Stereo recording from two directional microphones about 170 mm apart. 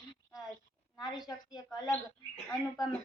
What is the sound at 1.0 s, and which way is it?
Speech, 25° left (ahead or behind).